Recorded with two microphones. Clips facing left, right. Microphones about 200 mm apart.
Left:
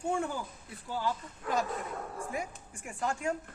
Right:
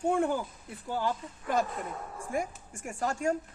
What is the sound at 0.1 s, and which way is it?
A woman's voice, 55° right (ahead or behind).